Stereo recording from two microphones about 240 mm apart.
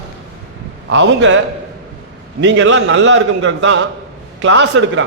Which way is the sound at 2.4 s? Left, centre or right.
Right.